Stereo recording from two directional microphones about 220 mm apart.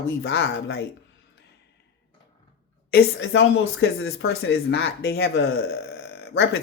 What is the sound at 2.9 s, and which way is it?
Speech, 45° left (ahead or behind).